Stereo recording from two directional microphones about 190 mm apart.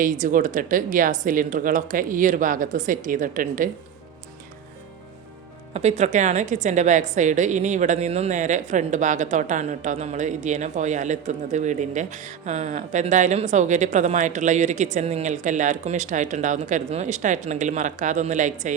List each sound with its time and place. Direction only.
0.0 s speech: 45° right (ahead or behind)
5.7 s a woman's voice: 35° right (ahead or behind)